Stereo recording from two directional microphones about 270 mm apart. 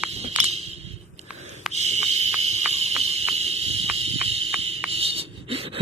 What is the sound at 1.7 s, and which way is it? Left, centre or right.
Fire alarm, right.